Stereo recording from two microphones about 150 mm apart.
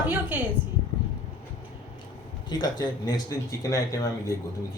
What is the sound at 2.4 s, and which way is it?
Speech, 30° left (ahead or behind).